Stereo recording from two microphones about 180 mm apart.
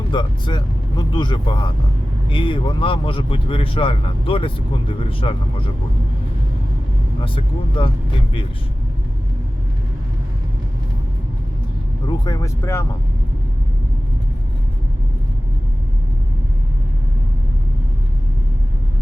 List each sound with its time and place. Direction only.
0.1 s speech: 25° left (ahead or behind)
7.8 s speech: 30° left (ahead or behind)
12.0 s speech: 20° left (ahead or behind)